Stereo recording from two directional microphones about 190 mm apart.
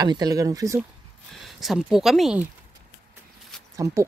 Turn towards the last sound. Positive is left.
turn(degrees=-15)  # may be behind; listen again after turning